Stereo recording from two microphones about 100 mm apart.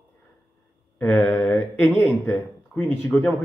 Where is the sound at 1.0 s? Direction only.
15° left (ahead or behind).